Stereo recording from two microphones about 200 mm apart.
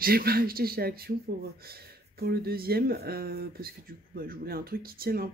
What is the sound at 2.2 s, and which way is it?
Speech, 50° right (ahead or behind).